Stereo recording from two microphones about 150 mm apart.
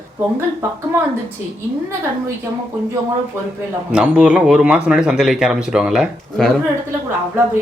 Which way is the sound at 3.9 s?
5° right (ahead or behind).